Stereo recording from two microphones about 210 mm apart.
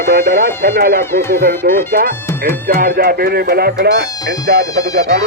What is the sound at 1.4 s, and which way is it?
Speech, 45° right (ahead or behind).